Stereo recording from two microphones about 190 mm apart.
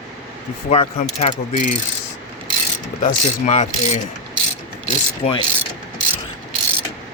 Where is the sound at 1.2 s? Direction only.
40° left (ahead or behind).